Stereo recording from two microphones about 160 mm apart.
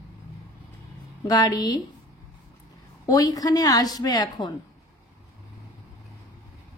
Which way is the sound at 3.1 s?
25° left (ahead or behind).